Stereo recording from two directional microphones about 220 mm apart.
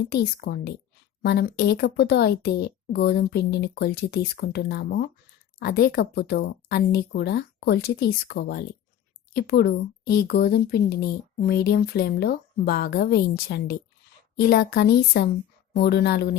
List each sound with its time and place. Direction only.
0.0 s a woman's voice: 45° left (ahead or behind)